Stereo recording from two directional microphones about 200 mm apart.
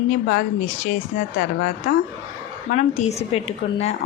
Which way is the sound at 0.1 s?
40° left (ahead or behind).